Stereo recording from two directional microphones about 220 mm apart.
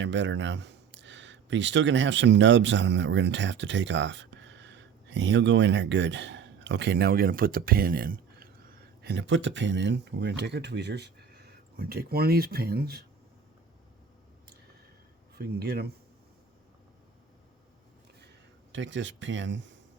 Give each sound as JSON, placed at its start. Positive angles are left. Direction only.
{"t": 0.0, "sound": "speech", "side_deg": -55}
{"t": 15.4, "sound": "speech", "side_deg": -45}
{"t": 18.7, "sound": "speech", "side_deg": -55}